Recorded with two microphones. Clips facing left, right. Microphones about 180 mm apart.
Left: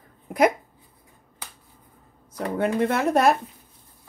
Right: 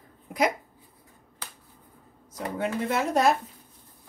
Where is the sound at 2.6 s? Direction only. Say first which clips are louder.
Left 5 dB; 60° left (ahead or behind).